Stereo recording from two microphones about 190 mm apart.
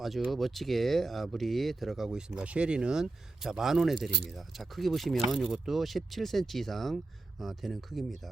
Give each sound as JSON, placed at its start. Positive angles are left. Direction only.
{"t": 0.0, "sound": "speech", "side_deg": 0}